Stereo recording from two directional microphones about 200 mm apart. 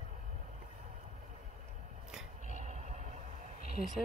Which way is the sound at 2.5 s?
35° right (ahead or behind).